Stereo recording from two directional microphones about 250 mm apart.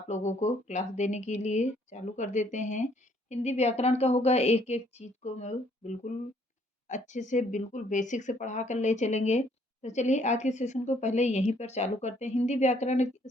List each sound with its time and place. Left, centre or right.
0.1 s speech: left